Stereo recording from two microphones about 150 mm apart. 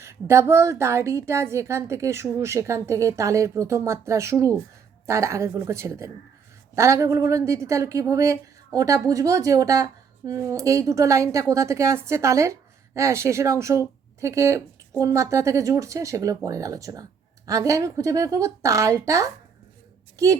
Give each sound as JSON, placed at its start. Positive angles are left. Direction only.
{"t": 0.0, "sound": "a woman's voice", "side_deg": -20}